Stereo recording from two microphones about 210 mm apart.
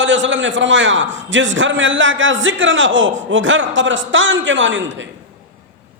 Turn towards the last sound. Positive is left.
turn(degrees=-60)  # may be behind; listen again after turning